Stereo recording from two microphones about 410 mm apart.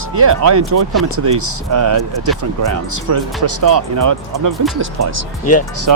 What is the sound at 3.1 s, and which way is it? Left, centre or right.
Speech, right.